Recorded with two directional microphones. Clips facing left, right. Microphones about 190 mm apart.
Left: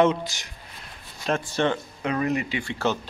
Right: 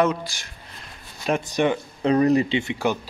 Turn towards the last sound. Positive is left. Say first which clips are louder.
# right 2 dB
turn(degrees=-15)  # may be behind; listen again after turning